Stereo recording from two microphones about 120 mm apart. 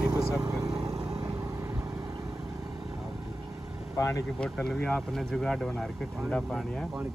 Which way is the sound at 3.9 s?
25° left (ahead or behind).